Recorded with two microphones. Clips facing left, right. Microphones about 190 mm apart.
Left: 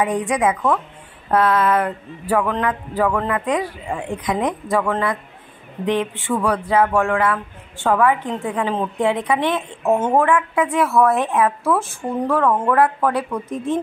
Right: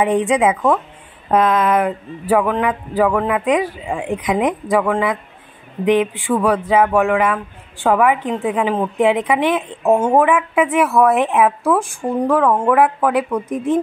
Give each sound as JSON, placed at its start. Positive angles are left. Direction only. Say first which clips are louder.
{"t": 0.0, "sound": "a woman's voice", "louder": "right 4 dB", "side_deg": -25}